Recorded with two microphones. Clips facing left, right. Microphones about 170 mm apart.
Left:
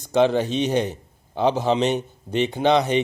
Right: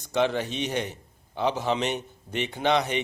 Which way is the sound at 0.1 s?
35° left (ahead or behind).